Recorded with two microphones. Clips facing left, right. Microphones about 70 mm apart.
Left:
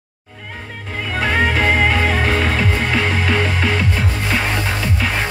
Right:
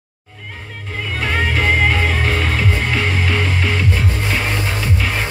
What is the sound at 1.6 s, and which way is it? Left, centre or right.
Music, centre.